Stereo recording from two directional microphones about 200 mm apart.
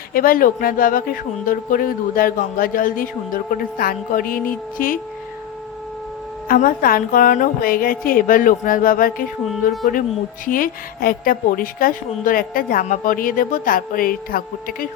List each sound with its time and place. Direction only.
0.1 s speech: 45° left (ahead or behind)
6.5 s speech: 45° left (ahead or behind)